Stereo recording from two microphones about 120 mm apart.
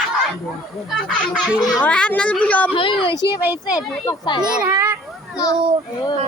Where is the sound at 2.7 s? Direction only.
45° left (ahead or behind).